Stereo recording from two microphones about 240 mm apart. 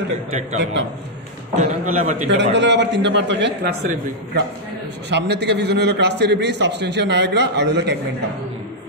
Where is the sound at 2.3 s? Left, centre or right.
Right.